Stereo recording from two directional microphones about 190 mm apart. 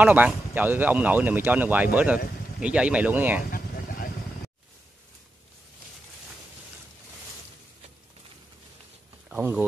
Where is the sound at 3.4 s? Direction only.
50° left (ahead or behind).